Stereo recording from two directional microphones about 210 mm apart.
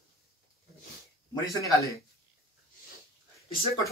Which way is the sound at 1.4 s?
15° left (ahead or behind).